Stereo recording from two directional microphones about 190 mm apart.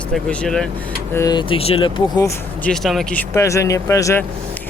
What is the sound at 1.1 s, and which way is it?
Speech, 20° left (ahead or behind).